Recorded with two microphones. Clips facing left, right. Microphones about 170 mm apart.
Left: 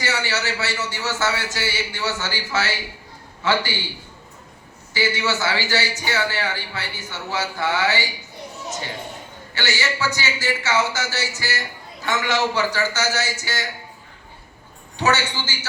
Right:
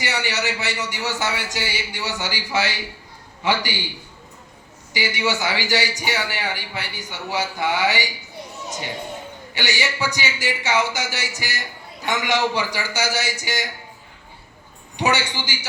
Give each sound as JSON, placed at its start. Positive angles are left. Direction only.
{"t": 0.0, "sound": "a man's voice", "side_deg": -15}
{"t": 4.9, "sound": "a man's voice", "side_deg": -15}
{"t": 9.6, "sound": "a man's voice", "side_deg": -15}
{"t": 14.9, "sound": "a man's voice", "side_deg": -15}